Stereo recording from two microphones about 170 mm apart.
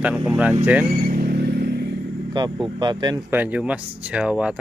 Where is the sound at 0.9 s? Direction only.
60° right (ahead or behind).